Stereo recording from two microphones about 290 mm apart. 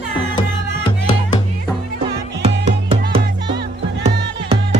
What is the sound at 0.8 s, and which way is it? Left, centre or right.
Music, centre.